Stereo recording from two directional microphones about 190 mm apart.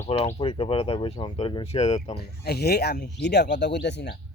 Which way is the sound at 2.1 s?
60° left (ahead or behind).